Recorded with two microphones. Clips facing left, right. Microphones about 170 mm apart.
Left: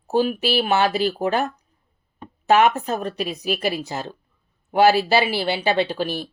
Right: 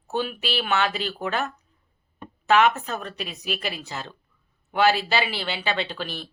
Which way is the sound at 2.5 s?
45° left (ahead or behind).